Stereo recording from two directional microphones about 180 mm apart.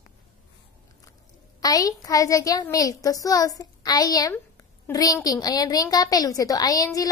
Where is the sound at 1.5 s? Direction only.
20° left (ahead or behind).